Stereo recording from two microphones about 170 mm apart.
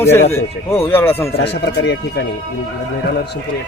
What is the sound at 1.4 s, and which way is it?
Speech, 85° left.